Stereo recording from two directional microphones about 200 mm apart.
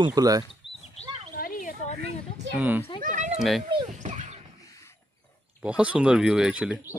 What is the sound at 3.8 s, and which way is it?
Dog, 40° right (ahead or behind).